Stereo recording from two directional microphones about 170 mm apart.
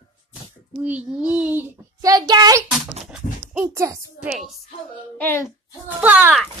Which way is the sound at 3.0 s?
5° right (ahead or behind).